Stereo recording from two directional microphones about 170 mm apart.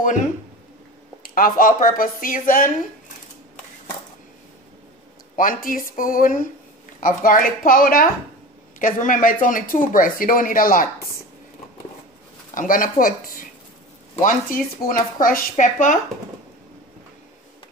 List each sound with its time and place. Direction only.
1.2 s speech: 55° left (ahead or behind)
5.4 s speech: 55° left (ahead or behind)
12.5 s speech: 55° left (ahead or behind)